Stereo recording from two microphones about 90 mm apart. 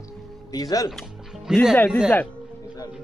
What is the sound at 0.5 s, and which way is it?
Music, 40° left (ahead or behind).